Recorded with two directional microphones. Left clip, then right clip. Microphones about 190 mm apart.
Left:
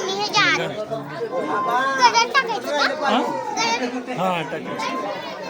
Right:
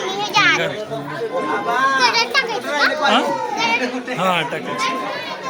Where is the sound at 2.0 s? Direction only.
10° right (ahead or behind).